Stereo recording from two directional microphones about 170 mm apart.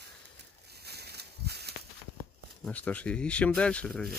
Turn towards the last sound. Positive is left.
turn(degrees=5)  # may be behind; listen again after turning